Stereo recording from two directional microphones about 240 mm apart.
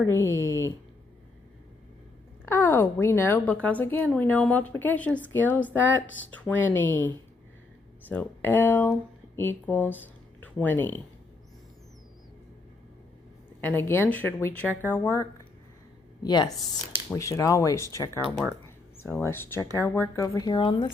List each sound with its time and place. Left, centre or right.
0.1 s speech: centre
2.5 s a woman's voice: centre
8.1 s speech: centre
13.6 s a woman's voice: centre